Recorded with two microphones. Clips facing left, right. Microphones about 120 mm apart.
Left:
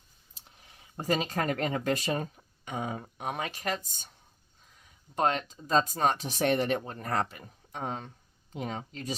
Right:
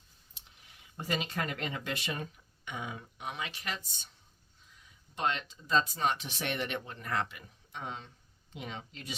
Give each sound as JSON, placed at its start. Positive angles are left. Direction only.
{"t": 0.3, "sound": "speech", "side_deg": 40}
{"t": 5.1, "sound": "speech", "side_deg": 45}